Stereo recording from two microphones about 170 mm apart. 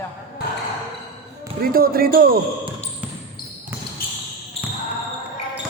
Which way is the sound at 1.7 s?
60° right (ahead or behind).